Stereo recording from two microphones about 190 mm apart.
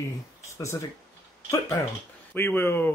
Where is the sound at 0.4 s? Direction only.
15° left (ahead or behind).